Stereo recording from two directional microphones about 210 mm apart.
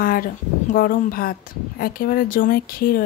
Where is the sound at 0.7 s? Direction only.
45° left (ahead or behind).